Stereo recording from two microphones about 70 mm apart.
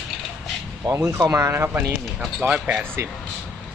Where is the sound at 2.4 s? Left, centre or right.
Right.